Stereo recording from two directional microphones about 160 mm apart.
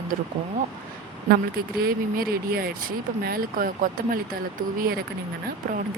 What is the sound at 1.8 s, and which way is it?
Speech, 70° right (ahead or behind).